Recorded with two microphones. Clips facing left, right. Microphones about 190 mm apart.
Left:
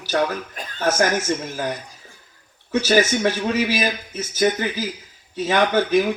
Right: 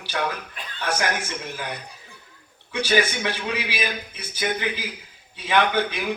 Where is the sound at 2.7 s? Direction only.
45° left (ahead or behind).